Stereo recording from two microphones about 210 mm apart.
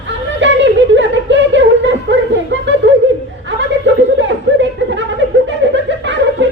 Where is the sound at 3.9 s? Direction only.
60° right (ahead or behind).